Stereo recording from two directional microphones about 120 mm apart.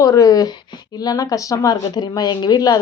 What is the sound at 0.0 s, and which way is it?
A woman's voice, 30° left (ahead or behind).